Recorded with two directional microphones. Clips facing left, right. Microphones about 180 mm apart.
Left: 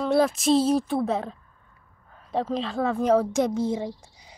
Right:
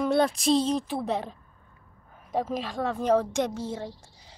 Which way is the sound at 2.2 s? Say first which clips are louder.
Left 2 dB; 15° right (ahead or behind).